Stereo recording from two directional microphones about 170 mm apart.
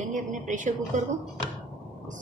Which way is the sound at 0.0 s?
50° right (ahead or behind).